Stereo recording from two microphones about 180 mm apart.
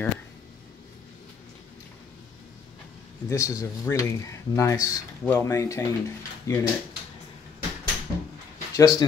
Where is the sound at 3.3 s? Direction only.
20° left (ahead or behind).